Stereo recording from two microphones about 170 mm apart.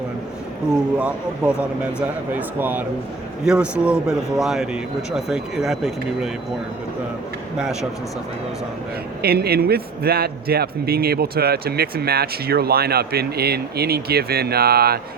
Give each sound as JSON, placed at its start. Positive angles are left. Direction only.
{"t": 0.8, "sound": "speech", "side_deg": -5}
{"t": 7.6, "sound": "speech", "side_deg": -5}
{"t": 9.2, "sound": "speech", "side_deg": -65}